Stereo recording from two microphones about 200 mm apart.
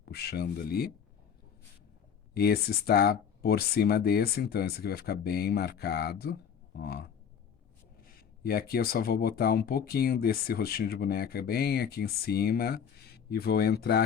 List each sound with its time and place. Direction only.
0.0 s speech: 55° left (ahead or behind)
2.3 s speech: 50° left (ahead or behind)
8.4 s speech: 50° left (ahead or behind)